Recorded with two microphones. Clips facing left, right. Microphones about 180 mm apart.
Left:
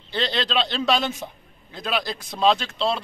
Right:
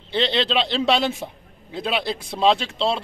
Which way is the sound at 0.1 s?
25° right (ahead or behind).